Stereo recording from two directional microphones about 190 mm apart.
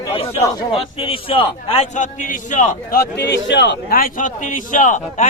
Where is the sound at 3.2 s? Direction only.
65° left (ahead or behind).